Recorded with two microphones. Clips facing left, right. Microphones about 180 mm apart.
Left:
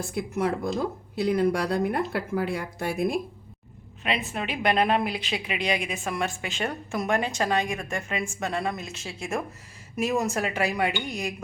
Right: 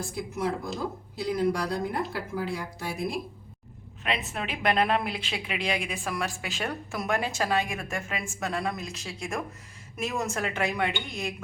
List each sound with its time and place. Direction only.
0.1 s speech: 60° left (ahead or behind)
4.0 s a woman's voice: centre (ahead or behind)